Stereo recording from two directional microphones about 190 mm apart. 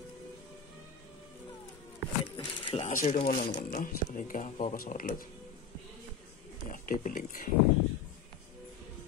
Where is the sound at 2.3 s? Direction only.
25° left (ahead or behind).